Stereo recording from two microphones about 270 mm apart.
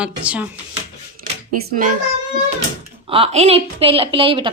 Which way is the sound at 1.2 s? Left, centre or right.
Right.